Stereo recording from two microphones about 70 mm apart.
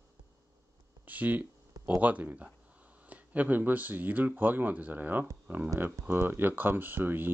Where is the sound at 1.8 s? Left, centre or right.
Right.